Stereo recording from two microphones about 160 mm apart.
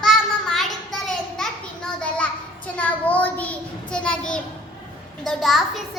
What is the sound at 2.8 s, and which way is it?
Child singing, 10° left (ahead or behind).